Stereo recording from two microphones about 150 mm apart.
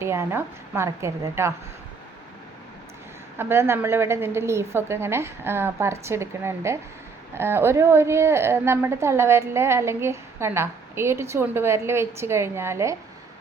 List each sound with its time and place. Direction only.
0.0 s a woman's voice: 15° right (ahead or behind)
3.3 s a woman's voice: 15° right (ahead or behind)